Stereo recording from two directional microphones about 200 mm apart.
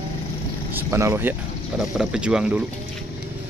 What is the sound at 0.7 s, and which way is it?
Speech, 15° right (ahead or behind).